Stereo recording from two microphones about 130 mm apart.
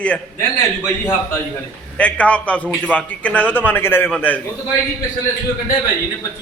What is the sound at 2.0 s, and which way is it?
A man's voice, 10° left (ahead or behind).